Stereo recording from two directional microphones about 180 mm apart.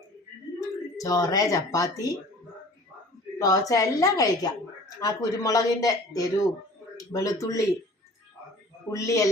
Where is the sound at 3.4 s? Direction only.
20° left (ahead or behind).